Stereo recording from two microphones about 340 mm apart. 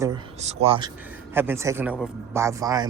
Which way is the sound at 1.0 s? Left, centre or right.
Centre.